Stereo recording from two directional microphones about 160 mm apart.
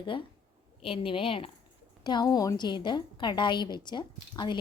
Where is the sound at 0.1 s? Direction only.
30° left (ahead or behind).